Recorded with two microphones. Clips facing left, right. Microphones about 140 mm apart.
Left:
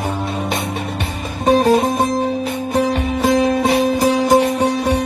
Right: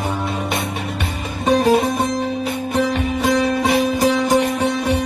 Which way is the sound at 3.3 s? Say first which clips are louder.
Left 3 dB; 35° left (ahead or behind).